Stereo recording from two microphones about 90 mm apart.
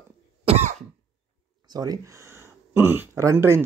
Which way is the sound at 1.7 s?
45° right (ahead or behind).